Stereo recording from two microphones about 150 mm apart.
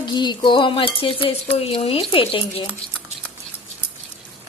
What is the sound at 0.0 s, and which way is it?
Speech, 30° left (ahead or behind).